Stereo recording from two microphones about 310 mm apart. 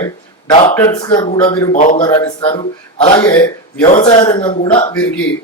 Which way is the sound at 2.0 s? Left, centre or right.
Centre.